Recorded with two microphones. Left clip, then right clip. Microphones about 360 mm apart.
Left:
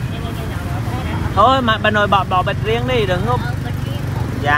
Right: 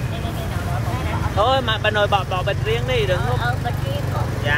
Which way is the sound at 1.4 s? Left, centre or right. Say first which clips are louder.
Left 5 dB; centre.